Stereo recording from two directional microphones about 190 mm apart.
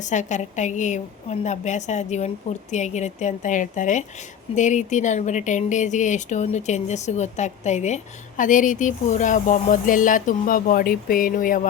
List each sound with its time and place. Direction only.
0.0 s speech: 40° left (ahead or behind)